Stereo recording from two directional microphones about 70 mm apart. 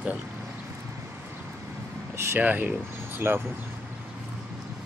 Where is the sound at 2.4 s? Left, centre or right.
Right.